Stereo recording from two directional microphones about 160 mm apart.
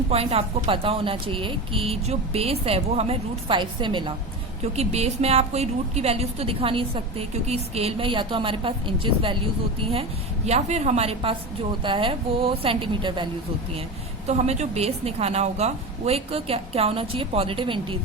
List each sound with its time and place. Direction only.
0.1 s a woman's voice: 40° right (ahead or behind)
4.6 s a woman's voice: 40° right (ahead or behind)
14.3 s a woman's voice: 45° right (ahead or behind)